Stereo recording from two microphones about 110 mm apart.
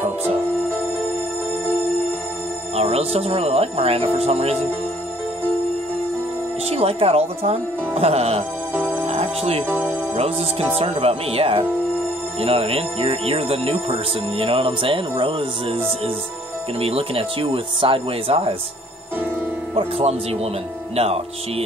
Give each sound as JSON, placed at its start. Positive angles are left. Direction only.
{"t": 2.7, "sound": "speech", "side_deg": -65}
{"t": 6.7, "sound": "speech", "side_deg": -65}
{"t": 9.0, "sound": "music", "side_deg": -65}
{"t": 9.7, "sound": "speech", "side_deg": -15}
{"t": 10.1, "sound": "speech", "side_deg": -65}
{"t": 19.7, "sound": "speech", "side_deg": -60}